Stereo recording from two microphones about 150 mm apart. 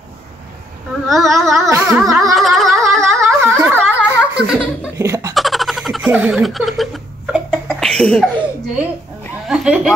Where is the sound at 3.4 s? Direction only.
15° right (ahead or behind).